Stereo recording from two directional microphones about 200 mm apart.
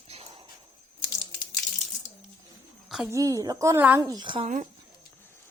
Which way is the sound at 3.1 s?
15° right (ahead or behind).